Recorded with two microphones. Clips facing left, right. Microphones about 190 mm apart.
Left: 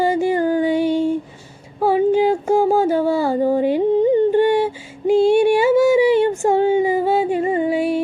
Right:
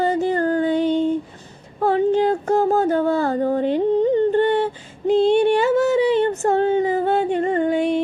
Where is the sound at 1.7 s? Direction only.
5° left (ahead or behind).